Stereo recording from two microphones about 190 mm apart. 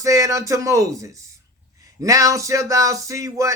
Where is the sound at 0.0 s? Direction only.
15° right (ahead or behind).